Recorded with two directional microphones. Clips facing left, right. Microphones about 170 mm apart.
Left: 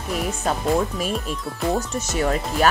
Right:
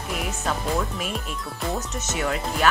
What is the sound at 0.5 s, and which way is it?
Speech, 35° left (ahead or behind).